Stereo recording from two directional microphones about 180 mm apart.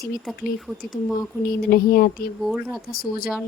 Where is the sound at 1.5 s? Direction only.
55° left (ahead or behind).